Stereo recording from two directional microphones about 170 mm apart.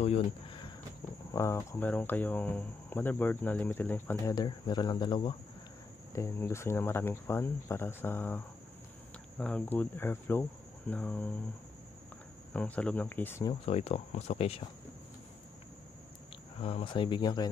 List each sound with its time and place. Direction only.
0.0 s speech: 35° left (ahead or behind)
1.3 s speech: 15° left (ahead or behind)
6.1 s speech: 15° left (ahead or behind)
12.5 s speech: 10° left (ahead or behind)
13.5 s speech: 35° left (ahead or behind)
16.6 s speech: 30° left (ahead or behind)